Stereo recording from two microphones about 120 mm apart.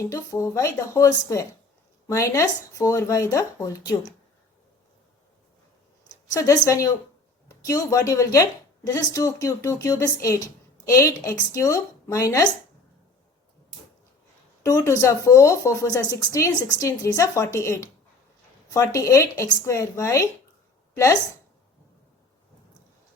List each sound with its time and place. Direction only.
0.0 s a woman's voice: 25° left (ahead or behind)
6.3 s a woman's voice: 30° left (ahead or behind)
14.6 s a woman's voice: 25° left (ahead or behind)